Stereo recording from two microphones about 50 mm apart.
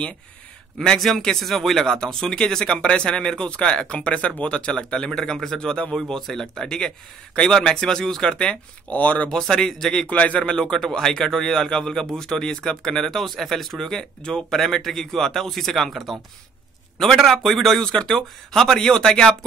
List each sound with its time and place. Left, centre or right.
0.7 s a man's voice: centre
8.9 s a man's voice: left
9.3 s a man's voice: centre
10.0 s a man's voice: left